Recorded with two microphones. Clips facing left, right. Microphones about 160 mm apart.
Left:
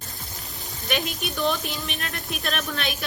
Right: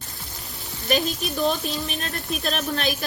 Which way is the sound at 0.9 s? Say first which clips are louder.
Right 4 dB; 35° right (ahead or behind).